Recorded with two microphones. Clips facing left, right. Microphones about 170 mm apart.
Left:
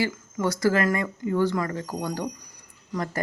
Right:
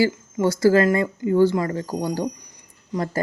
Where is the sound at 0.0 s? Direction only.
30° right (ahead or behind).